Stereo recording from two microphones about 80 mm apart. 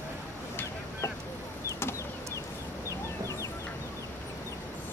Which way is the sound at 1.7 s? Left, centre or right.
Left.